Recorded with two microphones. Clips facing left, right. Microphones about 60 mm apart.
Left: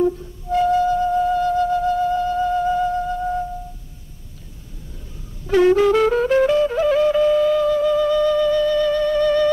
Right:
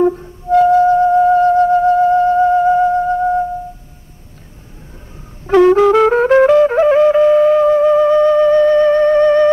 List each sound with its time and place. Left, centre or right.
0.0 s flute: right
5.5 s music: right